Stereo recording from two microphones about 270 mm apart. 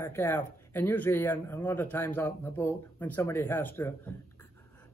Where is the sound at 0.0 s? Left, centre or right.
Centre.